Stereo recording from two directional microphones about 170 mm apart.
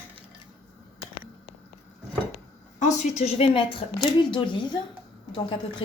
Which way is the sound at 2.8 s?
45° left (ahead or behind).